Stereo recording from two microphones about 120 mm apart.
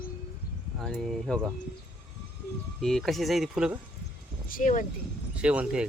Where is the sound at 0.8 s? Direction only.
5° left (ahead or behind).